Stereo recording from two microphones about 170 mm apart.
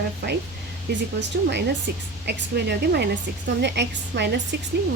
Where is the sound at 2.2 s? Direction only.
75° right (ahead or behind).